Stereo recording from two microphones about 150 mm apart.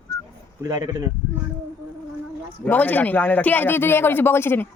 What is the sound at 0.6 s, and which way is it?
Speech, 20° right (ahead or behind).